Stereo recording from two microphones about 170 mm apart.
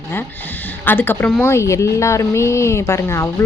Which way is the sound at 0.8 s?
10° left (ahead or behind).